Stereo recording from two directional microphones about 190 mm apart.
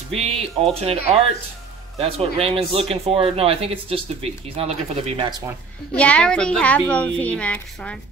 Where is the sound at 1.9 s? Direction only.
30° right (ahead or behind).